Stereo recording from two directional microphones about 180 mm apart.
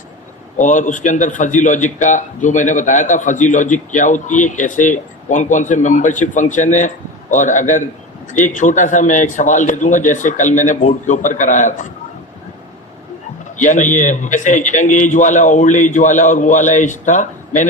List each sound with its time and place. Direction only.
0.6 s a man's voice: 45° left (ahead or behind)
13.6 s a man's voice: 45° left (ahead or behind)